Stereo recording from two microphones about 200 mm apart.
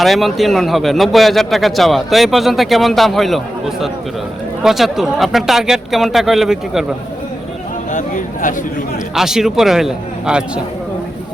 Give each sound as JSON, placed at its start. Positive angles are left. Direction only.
{"t": 0.0, "sound": "speech", "side_deg": 0}
{"t": 7.9, "sound": "speech", "side_deg": 40}
{"t": 9.1, "sound": "speech", "side_deg": 0}